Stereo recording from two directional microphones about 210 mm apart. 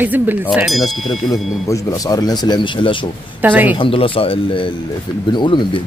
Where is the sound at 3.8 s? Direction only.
25° left (ahead or behind).